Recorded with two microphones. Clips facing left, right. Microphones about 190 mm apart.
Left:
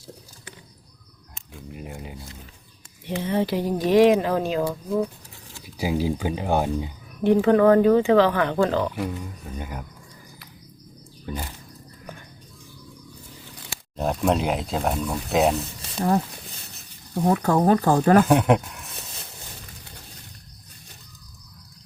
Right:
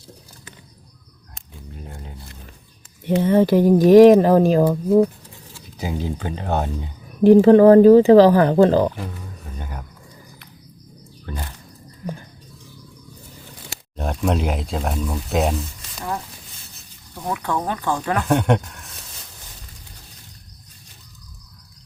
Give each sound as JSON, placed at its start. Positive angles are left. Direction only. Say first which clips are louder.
{"t": 1.7, "sound": "a sound", "louder": "left 2 dB", "side_deg": 10}
{"t": 3.2, "sound": "speech", "louder": "right 9 dB", "side_deg": -50}
{"t": 5.5, "sound": "speech", "louder": "left 3 dB", "side_deg": 10}
{"t": 7.3, "sound": "speech", "louder": "right 7 dB", "side_deg": -35}
{"t": 9.6, "sound": "speech", "louder": "left 1 dB", "side_deg": 10}
{"t": 11.3, "sound": "speech", "louder": "left 1 dB", "side_deg": 10}
{"t": 13.9, "sound": "speech", "louder": "even", "side_deg": 0}
{"t": 16.0, "sound": "speech", "louder": "left 7 dB", "side_deg": 35}
{"t": 18.3, "sound": "speech", "louder": "even", "side_deg": 0}